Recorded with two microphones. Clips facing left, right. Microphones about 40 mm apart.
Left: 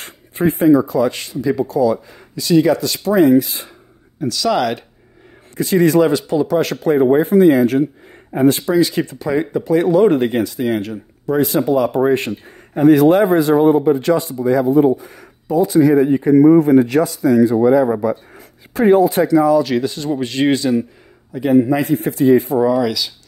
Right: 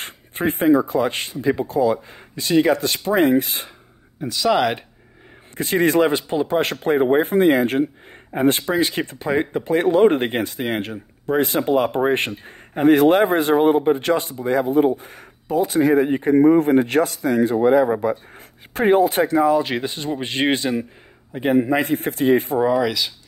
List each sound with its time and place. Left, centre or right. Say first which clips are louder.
0.0 s speech: left 5 dB; right
4.2 s speech: left 1 dB; centre
5.6 s a man's voice: left 4 dB; right
22.6 s speech: left 3 dB; right